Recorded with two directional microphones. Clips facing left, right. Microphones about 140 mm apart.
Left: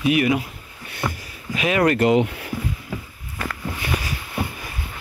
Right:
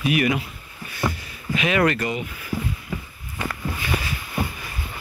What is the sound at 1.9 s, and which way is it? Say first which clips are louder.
Speech: left 10 dB; 80° left.